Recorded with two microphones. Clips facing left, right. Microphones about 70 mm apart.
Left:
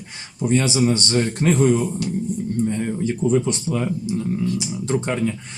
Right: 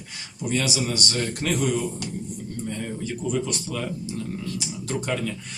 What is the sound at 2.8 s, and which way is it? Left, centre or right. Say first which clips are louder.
Speech: left 8 dB; left.